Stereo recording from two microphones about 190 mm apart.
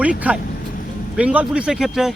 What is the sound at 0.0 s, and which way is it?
A man's voice, 10° right (ahead or behind).